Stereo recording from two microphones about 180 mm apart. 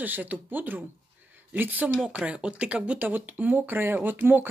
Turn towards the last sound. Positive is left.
turn(degrees=-10)  # may be behind; listen again after turning